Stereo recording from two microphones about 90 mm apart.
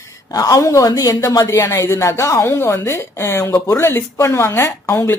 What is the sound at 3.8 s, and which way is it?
Speech, 30° left (ahead or behind).